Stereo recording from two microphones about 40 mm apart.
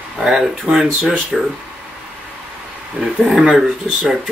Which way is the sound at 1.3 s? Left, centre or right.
Centre.